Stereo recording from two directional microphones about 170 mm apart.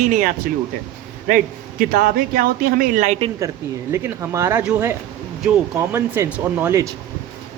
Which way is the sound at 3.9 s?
15° right (ahead or behind).